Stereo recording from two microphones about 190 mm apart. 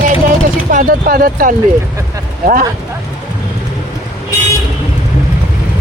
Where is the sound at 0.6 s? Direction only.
50° right (ahead or behind).